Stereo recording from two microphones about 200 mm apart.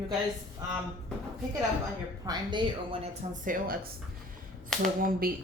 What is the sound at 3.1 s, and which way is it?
Speech, 40° right (ahead or behind).